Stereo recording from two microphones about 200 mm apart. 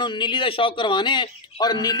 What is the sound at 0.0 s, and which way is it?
A man's voice, 25° left (ahead or behind).